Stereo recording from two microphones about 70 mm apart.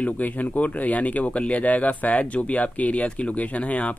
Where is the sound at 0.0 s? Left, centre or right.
Left.